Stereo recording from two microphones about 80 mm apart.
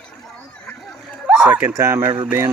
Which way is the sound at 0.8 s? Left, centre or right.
Centre.